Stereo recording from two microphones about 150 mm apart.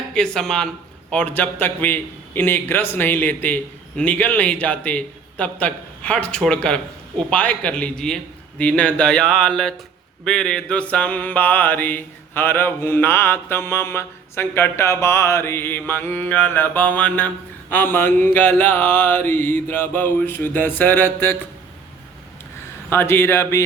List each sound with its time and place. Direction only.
0.1 s speech: 5° left (ahead or behind)
1.1 s mantra: 10° left (ahead or behind)
22.9 s mantra: 15° left (ahead or behind)